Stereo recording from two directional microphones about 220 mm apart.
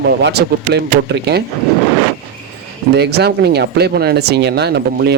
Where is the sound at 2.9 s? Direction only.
45° right (ahead or behind).